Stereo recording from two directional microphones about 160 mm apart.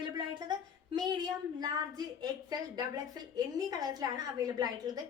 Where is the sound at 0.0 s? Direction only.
30° right (ahead or behind).